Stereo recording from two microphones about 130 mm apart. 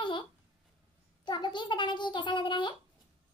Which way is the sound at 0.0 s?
40° left (ahead or behind).